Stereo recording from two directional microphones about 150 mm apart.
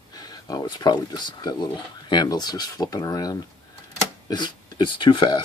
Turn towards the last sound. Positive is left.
turn(degrees=30)  # may be behind; listen again after turning